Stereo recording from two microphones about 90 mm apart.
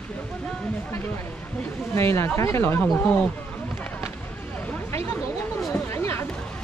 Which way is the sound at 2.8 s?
5° left (ahead or behind).